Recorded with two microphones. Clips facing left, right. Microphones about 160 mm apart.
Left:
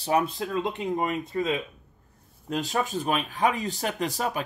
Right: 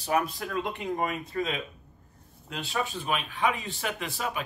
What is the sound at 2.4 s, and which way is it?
Speech, 40° left (ahead or behind).